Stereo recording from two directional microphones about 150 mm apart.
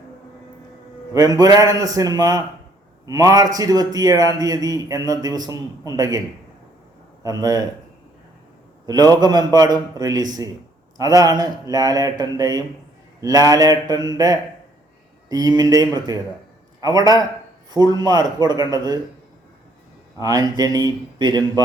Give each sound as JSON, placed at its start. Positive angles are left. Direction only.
{"t": 1.1, "sound": "a man's voice", "side_deg": -25}
{"t": 8.9, "sound": "a man's voice", "side_deg": -25}
{"t": 20.2, "sound": "a man's voice", "side_deg": -25}